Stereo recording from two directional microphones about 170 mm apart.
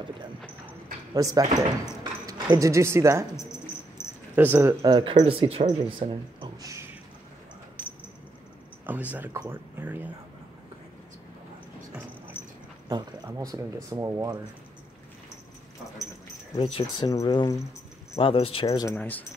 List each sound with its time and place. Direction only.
1.1 s speech: 20° right (ahead or behind)
4.0 s a sound: 15° left (ahead or behind)
4.4 s speech: 10° right (ahead or behind)
8.8 s speech: 10° right (ahead or behind)
12.8 s speech: 20° right (ahead or behind)
16.6 s speech: 30° left (ahead or behind)
18.7 s speech: 20° left (ahead or behind)